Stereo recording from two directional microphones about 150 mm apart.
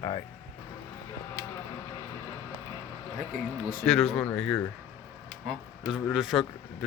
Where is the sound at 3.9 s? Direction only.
Centre (ahead or behind).